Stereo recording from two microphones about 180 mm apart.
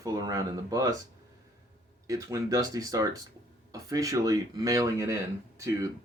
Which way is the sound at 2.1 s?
20° right (ahead or behind).